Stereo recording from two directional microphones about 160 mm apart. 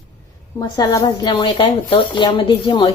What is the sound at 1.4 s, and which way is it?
Speech, 35° left (ahead or behind).